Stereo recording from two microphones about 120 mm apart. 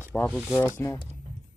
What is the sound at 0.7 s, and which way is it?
Speech, 20° left (ahead or behind).